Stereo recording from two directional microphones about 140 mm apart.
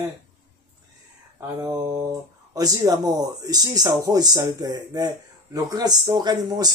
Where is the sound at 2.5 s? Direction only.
30° right (ahead or behind).